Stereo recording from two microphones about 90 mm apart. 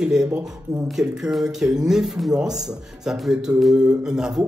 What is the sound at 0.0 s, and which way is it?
Speech, 5° right (ahead or behind).